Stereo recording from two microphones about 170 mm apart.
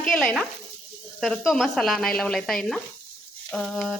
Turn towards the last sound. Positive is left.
turn(degrees=0)  # may be behind; listen again after turning